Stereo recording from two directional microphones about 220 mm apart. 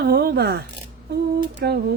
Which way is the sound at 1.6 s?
45° right (ahead or behind).